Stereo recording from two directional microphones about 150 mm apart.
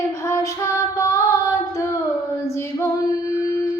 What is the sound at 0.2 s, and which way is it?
Child singing, 20° left (ahead or behind).